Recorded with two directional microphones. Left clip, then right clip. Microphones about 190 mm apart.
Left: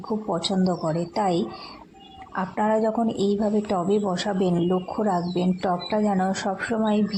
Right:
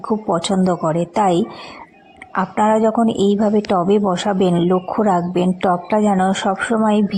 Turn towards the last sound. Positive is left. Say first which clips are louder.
# right 8 dB
turn(degrees=-30)  # may be behind; listen again after turning